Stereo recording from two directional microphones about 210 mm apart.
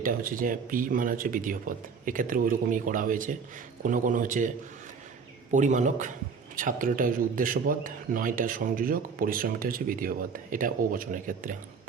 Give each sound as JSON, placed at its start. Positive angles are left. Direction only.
{"t": 0.0, "sound": "a man's voice", "side_deg": -40}